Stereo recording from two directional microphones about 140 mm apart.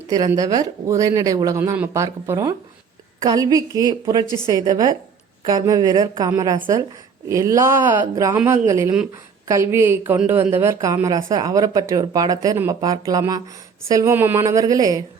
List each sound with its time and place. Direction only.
0.1 s speech: 25° right (ahead or behind)